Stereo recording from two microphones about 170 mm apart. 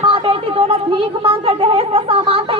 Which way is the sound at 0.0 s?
30° right (ahead or behind).